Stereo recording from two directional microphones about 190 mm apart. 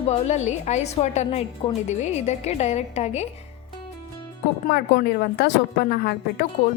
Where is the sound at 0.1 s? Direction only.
35° left (ahead or behind).